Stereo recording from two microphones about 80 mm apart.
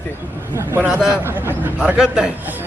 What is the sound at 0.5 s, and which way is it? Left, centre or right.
A man's voice, right.